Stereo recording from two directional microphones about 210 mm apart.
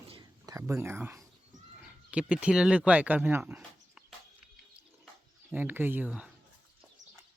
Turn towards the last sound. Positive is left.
turn(degrees=-5)  # may be behind; listen again after turning